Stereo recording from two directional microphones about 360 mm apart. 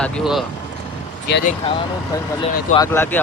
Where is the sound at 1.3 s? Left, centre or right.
Left.